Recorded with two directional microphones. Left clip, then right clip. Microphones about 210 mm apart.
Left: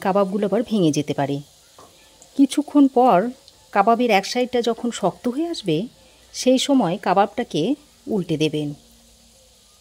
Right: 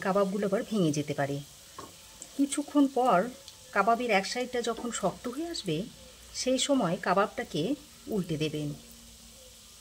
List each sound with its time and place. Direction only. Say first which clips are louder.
0.0 s speech: left 8 dB; 35° left (ahead or behind)
2.5 s speech: left 9 dB; 35° left (ahead or behind)